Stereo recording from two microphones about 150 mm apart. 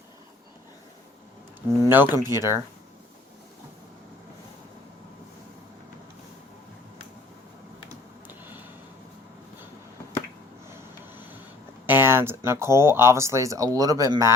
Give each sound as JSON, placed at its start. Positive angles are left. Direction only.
{"t": 1.8, "sound": "speech", "side_deg": -15}
{"t": 11.9, "sound": "speech", "side_deg": -15}